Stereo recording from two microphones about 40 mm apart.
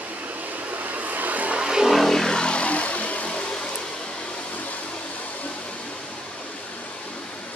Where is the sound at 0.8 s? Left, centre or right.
Right.